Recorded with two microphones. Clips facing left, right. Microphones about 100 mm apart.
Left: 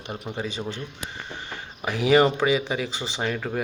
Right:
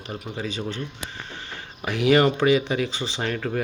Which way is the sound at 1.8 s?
5° left (ahead or behind).